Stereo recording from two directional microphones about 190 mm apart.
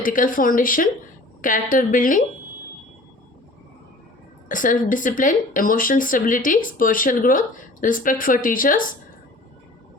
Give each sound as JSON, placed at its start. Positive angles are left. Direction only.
{"t": 0.0, "sound": "speech", "side_deg": 45}
{"t": 4.4, "sound": "speech", "side_deg": 45}